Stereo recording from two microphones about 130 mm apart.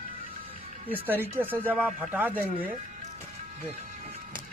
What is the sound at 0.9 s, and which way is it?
Speech, 15° right (ahead or behind).